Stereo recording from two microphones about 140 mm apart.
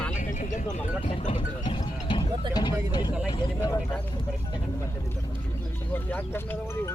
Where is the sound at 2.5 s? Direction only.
30° left (ahead or behind).